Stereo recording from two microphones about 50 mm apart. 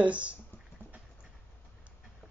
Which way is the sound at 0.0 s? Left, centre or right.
Right.